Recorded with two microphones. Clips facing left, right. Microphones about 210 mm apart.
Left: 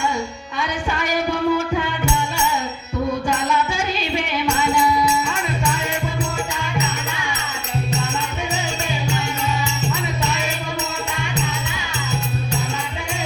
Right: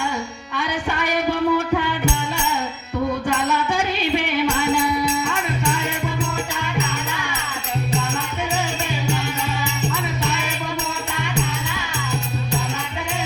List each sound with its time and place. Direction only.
0.5 s music: 60° right (ahead or behind)
3.5 s music: 60° right (ahead or behind)
6.6 s music: 60° right (ahead or behind)
9.9 s music: 60° right (ahead or behind)